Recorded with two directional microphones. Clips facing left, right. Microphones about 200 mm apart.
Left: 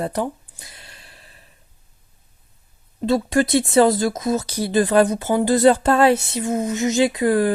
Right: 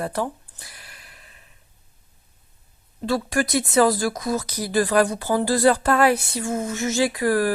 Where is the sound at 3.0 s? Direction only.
20° left (ahead or behind).